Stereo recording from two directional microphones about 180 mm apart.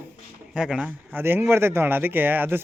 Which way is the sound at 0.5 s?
5° right (ahead or behind).